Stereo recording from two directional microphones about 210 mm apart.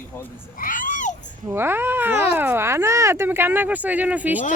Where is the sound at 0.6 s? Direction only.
40° left (ahead or behind).